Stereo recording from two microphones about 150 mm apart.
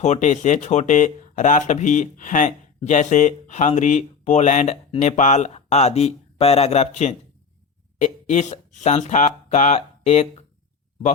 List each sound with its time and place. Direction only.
0.0 s speech: 50° left (ahead or behind)